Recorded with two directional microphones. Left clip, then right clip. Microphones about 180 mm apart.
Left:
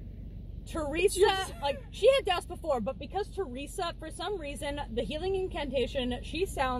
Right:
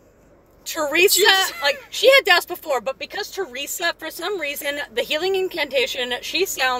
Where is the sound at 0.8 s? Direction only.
50° right (ahead or behind).